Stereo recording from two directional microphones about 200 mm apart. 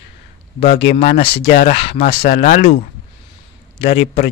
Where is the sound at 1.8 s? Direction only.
30° left (ahead or behind).